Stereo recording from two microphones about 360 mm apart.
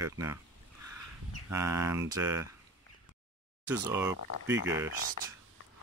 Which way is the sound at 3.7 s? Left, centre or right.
Centre.